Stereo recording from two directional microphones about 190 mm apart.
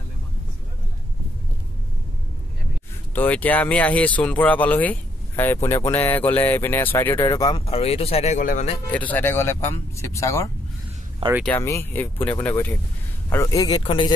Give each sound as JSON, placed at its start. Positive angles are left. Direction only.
{"t": 3.2, "sound": "speech", "side_deg": 10}
{"t": 8.9, "sound": "speech", "side_deg": 10}